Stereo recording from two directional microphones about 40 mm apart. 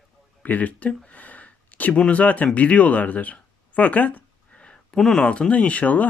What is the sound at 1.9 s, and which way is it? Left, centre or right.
Speech, left.